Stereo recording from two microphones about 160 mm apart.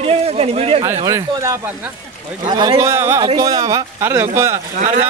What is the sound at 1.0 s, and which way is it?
Speech, 20° right (ahead or behind).